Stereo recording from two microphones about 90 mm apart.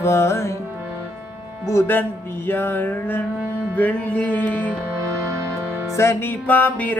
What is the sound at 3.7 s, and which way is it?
Mantra, 15° left (ahead or behind).